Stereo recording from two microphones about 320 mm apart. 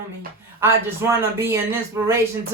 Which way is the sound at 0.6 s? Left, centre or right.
Centre.